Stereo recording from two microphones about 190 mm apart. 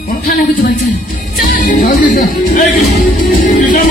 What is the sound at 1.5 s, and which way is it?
Music, 50° left (ahead or behind).